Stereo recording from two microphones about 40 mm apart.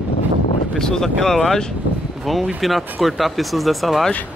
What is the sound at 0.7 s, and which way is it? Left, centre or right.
Speech, centre.